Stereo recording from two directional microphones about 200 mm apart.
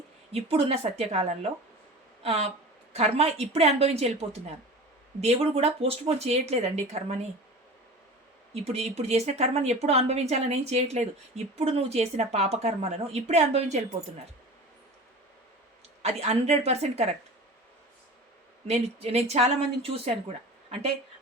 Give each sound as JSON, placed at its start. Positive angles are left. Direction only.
{"t": 0.3, "sound": "a woman's voice", "side_deg": -30}
{"t": 8.6, "sound": "speech", "side_deg": -30}
{"t": 16.0, "sound": "speech", "side_deg": -30}
{"t": 18.7, "sound": "speech", "side_deg": -30}